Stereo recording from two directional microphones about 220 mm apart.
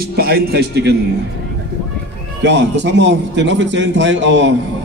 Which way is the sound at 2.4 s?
50° right (ahead or behind).